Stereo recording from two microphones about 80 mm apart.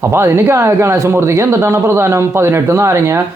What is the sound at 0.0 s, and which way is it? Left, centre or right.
Speech, right.